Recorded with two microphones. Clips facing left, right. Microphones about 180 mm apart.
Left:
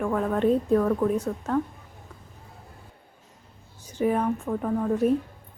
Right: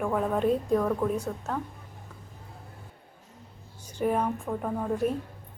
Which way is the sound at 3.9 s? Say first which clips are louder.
Left 3 dB; 10° left (ahead or behind).